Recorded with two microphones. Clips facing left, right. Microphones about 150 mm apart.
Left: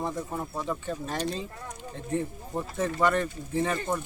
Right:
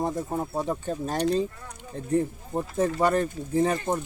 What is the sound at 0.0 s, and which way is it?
Speech, 35° right (ahead or behind).